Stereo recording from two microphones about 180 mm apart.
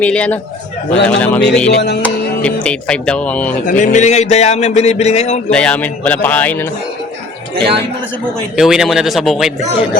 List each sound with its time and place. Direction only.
0.0 s a man's voice: 10° left (ahead or behind)
1.7 s music: 65° left (ahead or behind)
2.0 s speech: 5° left (ahead or behind)
3.7 s speech: 45° left (ahead or behind)
5.5 s speech: 5° left (ahead or behind)
8.5 s a man's voice: centre (ahead or behind)